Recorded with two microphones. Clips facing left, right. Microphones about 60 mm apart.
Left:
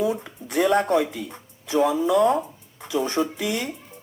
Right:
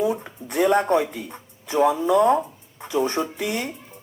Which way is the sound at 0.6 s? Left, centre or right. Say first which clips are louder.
Right 1 dB; right.